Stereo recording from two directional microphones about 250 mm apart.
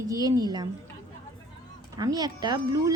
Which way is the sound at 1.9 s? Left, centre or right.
Centre.